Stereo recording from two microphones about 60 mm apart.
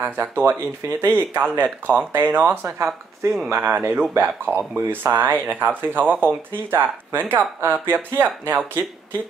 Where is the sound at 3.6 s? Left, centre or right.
Right.